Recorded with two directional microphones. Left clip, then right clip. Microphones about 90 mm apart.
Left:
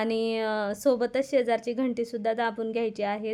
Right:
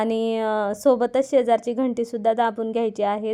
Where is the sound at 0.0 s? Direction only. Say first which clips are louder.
Right 5 dB; 30° right (ahead or behind).